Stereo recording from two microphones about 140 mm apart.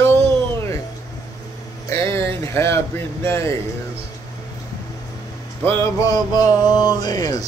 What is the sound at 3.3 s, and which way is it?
Music, 20° left (ahead or behind).